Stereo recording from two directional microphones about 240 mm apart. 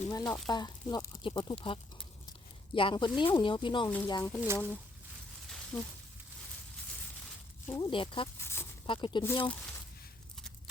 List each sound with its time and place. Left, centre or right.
0.1 s speech: centre
4.4 s speech: centre
5.7 s speech: centre
7.7 s speech: centre
8.4 s snake: centre
8.9 s speech: centre